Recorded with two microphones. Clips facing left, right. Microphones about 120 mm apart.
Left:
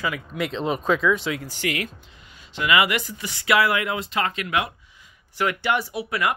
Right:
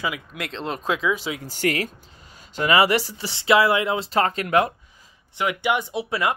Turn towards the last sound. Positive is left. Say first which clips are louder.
# right 1 dB
turn(degrees=-25)  # may be behind; listen again after turning